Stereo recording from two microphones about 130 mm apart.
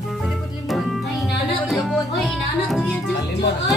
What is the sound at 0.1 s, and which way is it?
Music, centre (ahead or behind).